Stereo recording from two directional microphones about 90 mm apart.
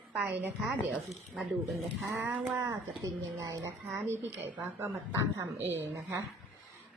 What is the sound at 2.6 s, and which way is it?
Speech, 35° right (ahead or behind).